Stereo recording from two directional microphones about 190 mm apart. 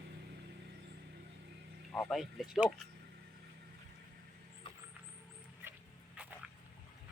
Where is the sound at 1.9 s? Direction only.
Centre (ahead or behind).